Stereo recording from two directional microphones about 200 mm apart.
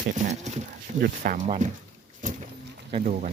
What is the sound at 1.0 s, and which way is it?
Speech, 45° right (ahead or behind).